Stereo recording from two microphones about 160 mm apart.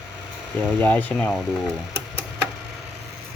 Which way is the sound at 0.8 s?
10° left (ahead or behind).